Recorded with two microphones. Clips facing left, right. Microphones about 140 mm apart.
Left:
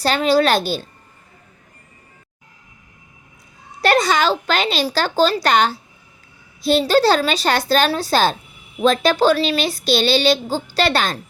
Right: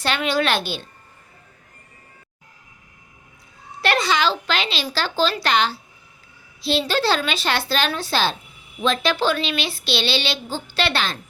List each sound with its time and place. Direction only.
0.0 s a woman's voice: 35° left (ahead or behind)
3.8 s a woman's voice: 40° left (ahead or behind)